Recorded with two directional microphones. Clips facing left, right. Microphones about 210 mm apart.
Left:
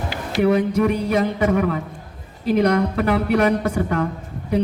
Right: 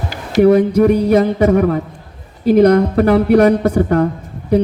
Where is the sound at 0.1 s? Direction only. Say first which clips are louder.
Right 8 dB; 40° right (ahead or behind).